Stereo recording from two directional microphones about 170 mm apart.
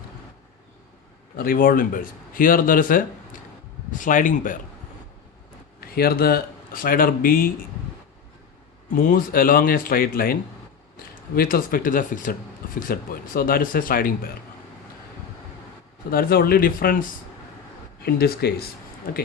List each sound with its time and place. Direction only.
1.4 s speech: 55° left (ahead or behind)
5.8 s speech: 60° left (ahead or behind)
8.9 s speech: 55° left (ahead or behind)
11.3 s speech: 60° left (ahead or behind)
16.0 s speech: 60° left (ahead or behind)
18.0 s speech: 70° left (ahead or behind)